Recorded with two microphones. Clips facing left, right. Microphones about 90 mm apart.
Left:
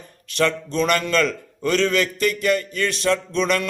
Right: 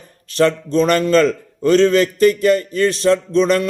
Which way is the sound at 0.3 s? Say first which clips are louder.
Right 6 dB; 35° right (ahead or behind).